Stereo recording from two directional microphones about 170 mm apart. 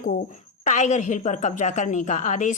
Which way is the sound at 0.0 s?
50° left (ahead or behind).